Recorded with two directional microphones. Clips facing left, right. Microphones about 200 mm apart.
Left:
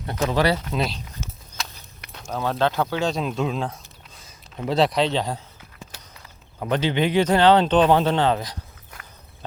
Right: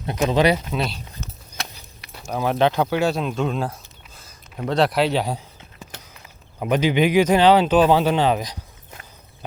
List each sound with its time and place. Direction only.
0.0 s speech: 15° right (ahead or behind)
0.7 s speech: centre (ahead or behind)
1.6 s a sound: 60° right (ahead or behind)
2.1 s speech: 10° right (ahead or behind)
6.6 s speech: 15° right (ahead or behind)